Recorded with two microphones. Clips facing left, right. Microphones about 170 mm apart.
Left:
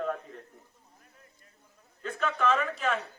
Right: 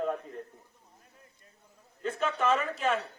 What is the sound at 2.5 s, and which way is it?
Speech, 35° right (ahead or behind).